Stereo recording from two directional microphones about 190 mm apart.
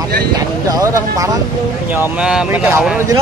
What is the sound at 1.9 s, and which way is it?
Speech, 5° right (ahead or behind).